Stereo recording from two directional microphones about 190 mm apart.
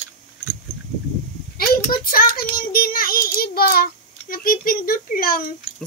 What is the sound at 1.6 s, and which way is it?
Child singing, 50° left (ahead or behind).